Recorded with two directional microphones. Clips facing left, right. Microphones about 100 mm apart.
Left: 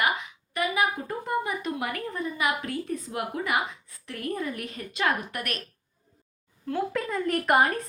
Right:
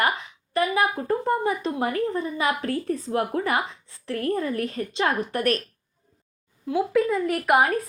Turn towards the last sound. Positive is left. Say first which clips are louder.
# right 2 dB
turn(degrees=-5)  # may be behind; listen again after turning